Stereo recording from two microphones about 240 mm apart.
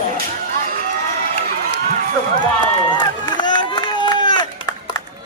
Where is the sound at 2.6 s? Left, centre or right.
Centre.